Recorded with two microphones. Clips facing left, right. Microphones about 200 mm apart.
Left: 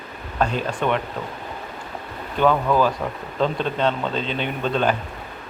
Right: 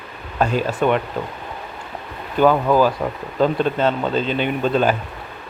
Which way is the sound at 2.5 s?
30° right (ahead or behind).